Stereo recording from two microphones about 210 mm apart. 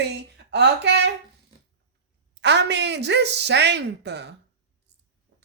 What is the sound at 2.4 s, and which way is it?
Speech, 55° right (ahead or behind).